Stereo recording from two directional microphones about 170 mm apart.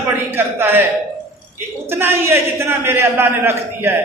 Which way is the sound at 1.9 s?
15° right (ahead or behind).